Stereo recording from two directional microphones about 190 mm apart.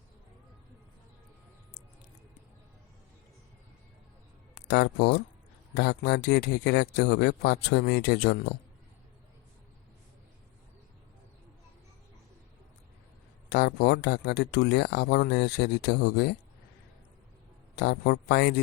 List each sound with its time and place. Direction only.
4.5 s a man's voice: 60° left (ahead or behind)
13.5 s a man's voice: 60° left (ahead or behind)
17.7 s a man's voice: 60° left (ahead or behind)